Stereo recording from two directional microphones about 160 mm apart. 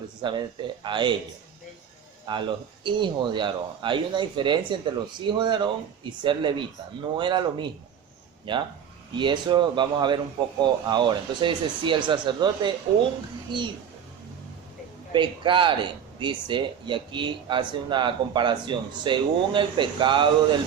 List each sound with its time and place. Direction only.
0.2 s speech: 30° right (ahead or behind)
2.2 s speech: 30° right (ahead or behind)
15.1 s speech: 30° right (ahead or behind)